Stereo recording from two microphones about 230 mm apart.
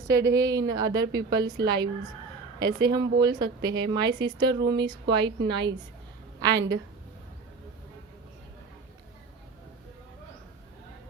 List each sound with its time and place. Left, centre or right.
0.1 s a woman's voice: centre